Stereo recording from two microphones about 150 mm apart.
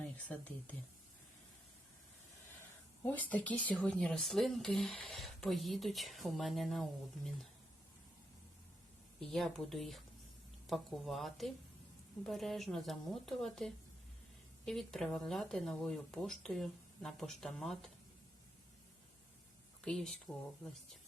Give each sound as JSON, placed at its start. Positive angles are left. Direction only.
{"t": 0.3, "sound": "speech", "side_deg": 10}
{"t": 3.0, "sound": "speech", "side_deg": 10}
{"t": 9.2, "sound": "speech", "side_deg": 0}
{"t": 19.8, "sound": "speech", "side_deg": 0}